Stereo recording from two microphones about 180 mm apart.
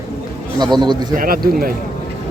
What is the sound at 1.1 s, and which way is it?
Speech, 55° right (ahead or behind).